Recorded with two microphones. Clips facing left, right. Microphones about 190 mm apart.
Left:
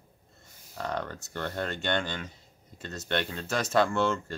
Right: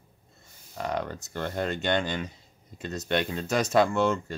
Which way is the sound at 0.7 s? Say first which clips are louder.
Right 3 dB; 15° right (ahead or behind).